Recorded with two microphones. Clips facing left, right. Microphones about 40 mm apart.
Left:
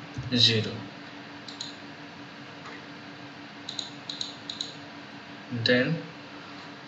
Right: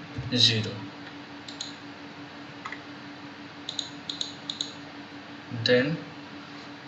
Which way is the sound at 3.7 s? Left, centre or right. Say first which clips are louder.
Right 2 dB; right.